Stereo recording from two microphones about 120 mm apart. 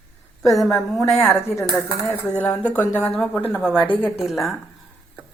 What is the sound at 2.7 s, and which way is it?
Speech, 10° left (ahead or behind).